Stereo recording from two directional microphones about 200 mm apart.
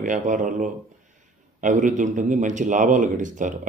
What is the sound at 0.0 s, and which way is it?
A man's voice, 40° right (ahead or behind).